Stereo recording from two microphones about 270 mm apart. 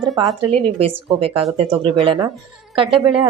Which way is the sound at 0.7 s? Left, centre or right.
Right.